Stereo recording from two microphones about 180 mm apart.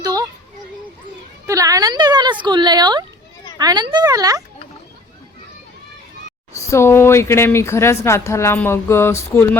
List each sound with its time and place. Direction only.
0.0 s a sound: 20° right (ahead or behind)
1.5 s speech: 20° right (ahead or behind)
6.5 s speech: 15° left (ahead or behind)